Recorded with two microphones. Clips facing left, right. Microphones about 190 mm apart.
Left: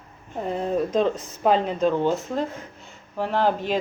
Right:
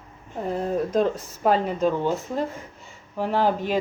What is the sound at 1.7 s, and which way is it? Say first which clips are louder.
Speech: left 1 dB; 10° right (ahead or behind).